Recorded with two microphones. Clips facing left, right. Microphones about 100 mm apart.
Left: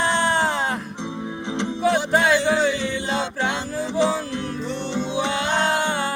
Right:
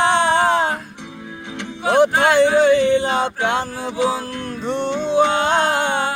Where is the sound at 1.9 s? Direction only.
60° right (ahead or behind).